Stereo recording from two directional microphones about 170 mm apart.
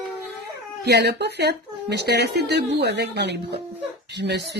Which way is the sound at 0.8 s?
75° right (ahead or behind).